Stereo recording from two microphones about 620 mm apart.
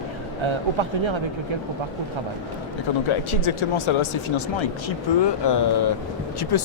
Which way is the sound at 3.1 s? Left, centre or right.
Left.